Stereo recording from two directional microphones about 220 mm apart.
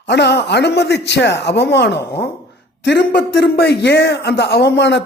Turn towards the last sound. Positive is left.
turn(degrees=50)  # may be behind; listen again after turning